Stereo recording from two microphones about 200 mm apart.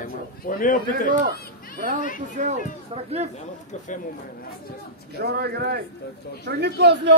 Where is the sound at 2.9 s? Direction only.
30° right (ahead or behind).